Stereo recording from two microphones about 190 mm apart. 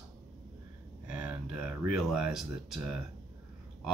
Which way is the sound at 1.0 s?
5° right (ahead or behind).